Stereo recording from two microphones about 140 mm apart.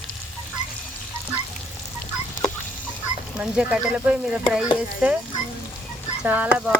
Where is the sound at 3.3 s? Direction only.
5° right (ahead or behind).